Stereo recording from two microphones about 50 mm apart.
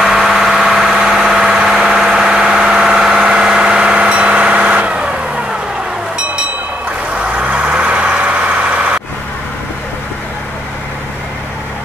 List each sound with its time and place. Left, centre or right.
0.0 s engine: centre
0.9 s vehicle: centre; by 5.0 s right
7.3 s vehicle: right